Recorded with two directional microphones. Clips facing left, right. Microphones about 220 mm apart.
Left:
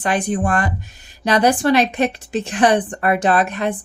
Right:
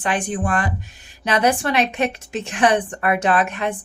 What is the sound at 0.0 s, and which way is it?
A woman's voice, 40° left (ahead or behind).